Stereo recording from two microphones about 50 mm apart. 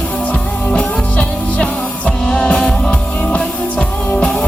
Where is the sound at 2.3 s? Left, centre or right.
Centre.